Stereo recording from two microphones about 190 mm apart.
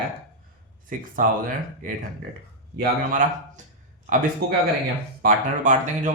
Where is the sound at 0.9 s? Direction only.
45° right (ahead or behind).